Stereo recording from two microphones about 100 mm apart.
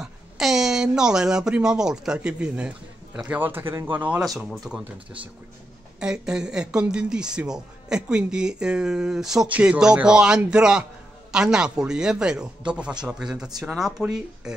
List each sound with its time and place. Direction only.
0.0 s speech: 5° right (ahead or behind)
4.5 s speech: 5° right (ahead or behind)